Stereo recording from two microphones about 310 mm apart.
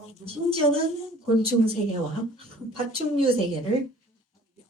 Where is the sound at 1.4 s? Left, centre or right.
Centre.